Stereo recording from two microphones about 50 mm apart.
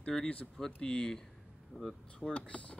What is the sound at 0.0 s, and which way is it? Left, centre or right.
Speech, centre.